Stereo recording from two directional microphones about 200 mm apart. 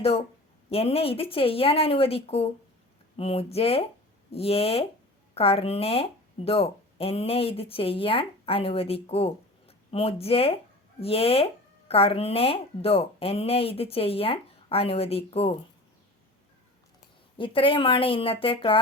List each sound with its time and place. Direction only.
0.7 s speech: 30° left (ahead or behind)
17.3 s speech: 25° left (ahead or behind)